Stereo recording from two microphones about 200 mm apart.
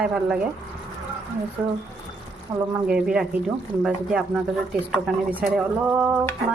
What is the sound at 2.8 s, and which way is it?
Speech, 5° right (ahead or behind).